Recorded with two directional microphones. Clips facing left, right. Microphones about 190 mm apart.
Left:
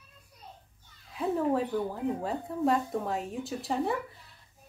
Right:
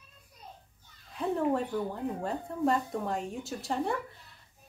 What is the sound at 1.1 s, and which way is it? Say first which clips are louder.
A woman's voice: left 1 dB; centre (ahead or behind).